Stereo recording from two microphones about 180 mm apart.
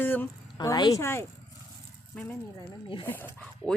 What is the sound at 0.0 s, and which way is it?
Speech, 10° left (ahead or behind).